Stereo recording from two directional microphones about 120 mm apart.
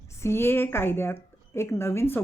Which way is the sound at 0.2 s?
20° left (ahead or behind).